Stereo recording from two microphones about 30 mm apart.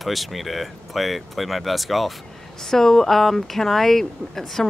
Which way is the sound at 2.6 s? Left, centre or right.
Centre.